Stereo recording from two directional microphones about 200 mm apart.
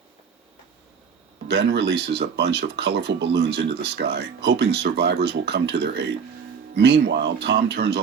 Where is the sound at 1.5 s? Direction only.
55° right (ahead or behind).